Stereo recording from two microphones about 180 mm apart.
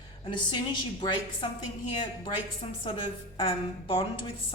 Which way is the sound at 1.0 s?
25° left (ahead or behind).